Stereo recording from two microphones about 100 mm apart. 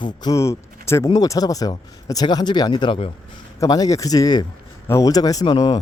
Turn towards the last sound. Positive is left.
turn(degrees=45)  # may be behind; listen again after turning